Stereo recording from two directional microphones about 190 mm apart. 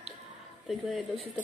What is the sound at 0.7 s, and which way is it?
Speech, centre (ahead or behind).